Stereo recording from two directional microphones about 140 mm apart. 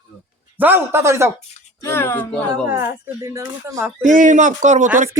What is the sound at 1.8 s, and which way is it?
Speech, 15° left (ahead or behind).